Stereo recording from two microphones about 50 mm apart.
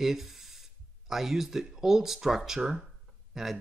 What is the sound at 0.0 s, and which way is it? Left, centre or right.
Speech, centre.